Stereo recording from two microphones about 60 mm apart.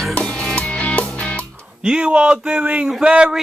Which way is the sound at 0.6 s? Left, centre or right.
Left.